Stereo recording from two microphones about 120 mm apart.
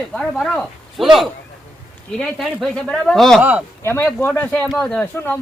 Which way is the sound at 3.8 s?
20° left (ahead or behind).